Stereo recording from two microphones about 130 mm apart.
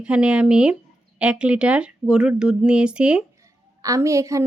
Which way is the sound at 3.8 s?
25° right (ahead or behind).